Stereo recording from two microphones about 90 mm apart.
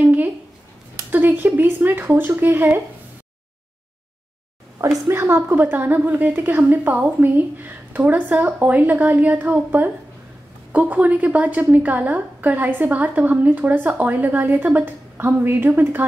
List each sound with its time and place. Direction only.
0.0 s a sound: 20° right (ahead or behind)
4.7 s a woman's voice: 40° right (ahead or behind)
5.1 s a woman's voice: 25° right (ahead or behind)